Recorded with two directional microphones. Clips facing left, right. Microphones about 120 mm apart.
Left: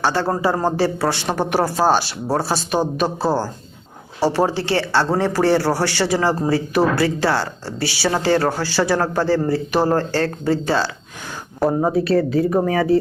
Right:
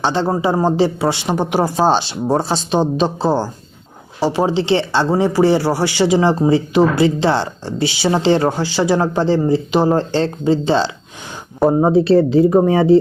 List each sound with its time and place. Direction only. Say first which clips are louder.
0.0 s speech: right 2 dB; 20° right (ahead or behind)